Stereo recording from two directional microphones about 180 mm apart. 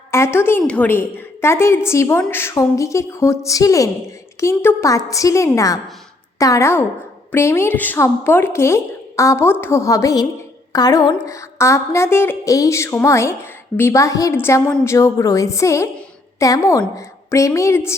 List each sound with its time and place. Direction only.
0.1 s a woman's voice: 15° left (ahead or behind)